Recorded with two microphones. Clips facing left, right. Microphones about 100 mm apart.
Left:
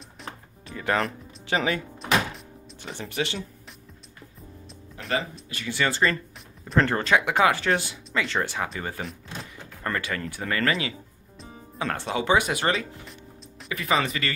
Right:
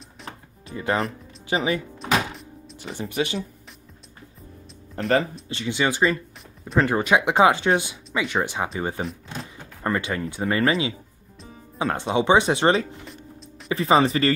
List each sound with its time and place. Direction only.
0.7 s speech: 25° right (ahead or behind)
0.9 s speech: 5° right (ahead or behind)
2.8 s speech: 10° right (ahead or behind)
4.9 s speech: 50° right (ahead or behind)
5.5 s speech: 25° right (ahead or behind); by 7.0 s 5° right (ahead or behind)
7.0 s speech: 15° right (ahead or behind); by 14.3 s 30° right (ahead or behind)